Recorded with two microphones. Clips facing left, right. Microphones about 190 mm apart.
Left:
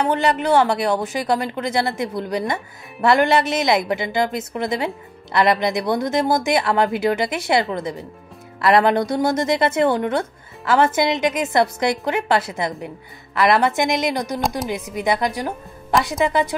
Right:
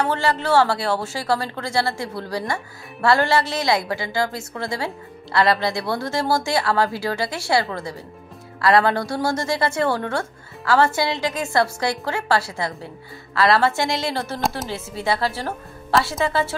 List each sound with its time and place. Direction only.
0.0 s speech: 20° left (ahead or behind)